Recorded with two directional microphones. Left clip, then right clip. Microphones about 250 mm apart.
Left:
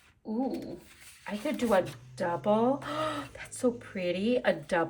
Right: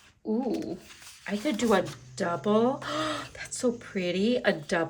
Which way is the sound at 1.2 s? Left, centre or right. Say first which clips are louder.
Right 3 dB; centre.